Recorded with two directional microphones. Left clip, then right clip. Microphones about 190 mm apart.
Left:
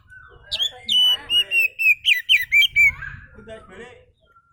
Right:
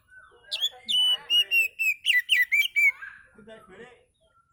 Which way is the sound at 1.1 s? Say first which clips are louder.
Left 3 dB; 35° left (ahead or behind).